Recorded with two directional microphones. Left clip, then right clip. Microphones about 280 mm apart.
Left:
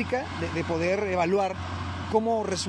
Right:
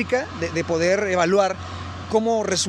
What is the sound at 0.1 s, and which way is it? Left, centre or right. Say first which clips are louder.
Speech: right 6 dB; right.